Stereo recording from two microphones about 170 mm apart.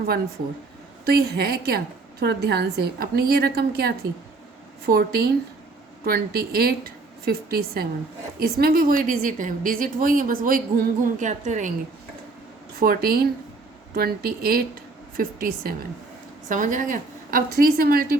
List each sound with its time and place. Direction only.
1.0 s a woman's voice: 70° right (ahead or behind); by 11.7 s 45° right (ahead or behind)
12.8 s a woman's voice: 60° right (ahead or behind)